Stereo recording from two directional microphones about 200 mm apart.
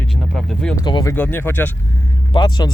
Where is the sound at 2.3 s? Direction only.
25° left (ahead or behind).